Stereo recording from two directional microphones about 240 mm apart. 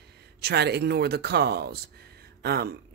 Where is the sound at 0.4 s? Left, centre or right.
Right.